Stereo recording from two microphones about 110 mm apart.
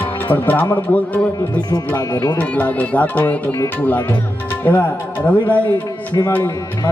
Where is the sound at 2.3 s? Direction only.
15° left (ahead or behind).